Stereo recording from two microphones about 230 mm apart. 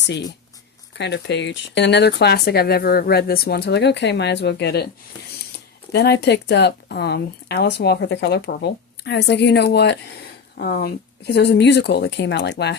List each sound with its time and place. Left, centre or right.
0.9 s speech: left
5.9 s speech: left